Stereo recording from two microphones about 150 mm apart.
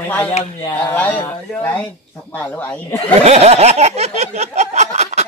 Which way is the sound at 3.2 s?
45° right (ahead or behind).